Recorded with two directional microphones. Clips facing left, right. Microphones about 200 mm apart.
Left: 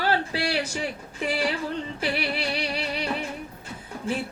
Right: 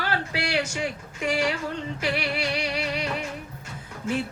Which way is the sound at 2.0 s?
30° left (ahead or behind).